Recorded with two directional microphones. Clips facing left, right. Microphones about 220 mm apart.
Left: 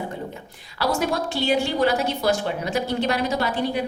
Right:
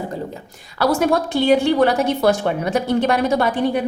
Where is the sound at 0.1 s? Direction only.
35° right (ahead or behind).